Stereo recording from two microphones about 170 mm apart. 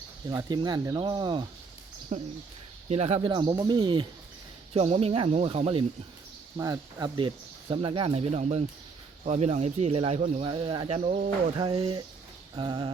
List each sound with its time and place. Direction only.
0.3 s speech: 25° right (ahead or behind)
2.1 s speech: 40° right (ahead or behind)
6.6 s speech: 20° right (ahead or behind); by 10.4 s 40° right (ahead or behind)
10.4 s speech: 30° right (ahead or behind)
11.5 s speech: 25° right (ahead or behind)